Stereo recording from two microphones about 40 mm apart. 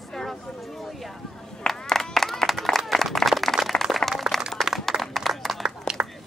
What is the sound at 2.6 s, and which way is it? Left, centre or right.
Applause, centre.